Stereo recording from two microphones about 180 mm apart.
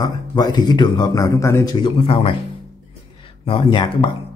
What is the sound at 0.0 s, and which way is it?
Speech, 20° left (ahead or behind).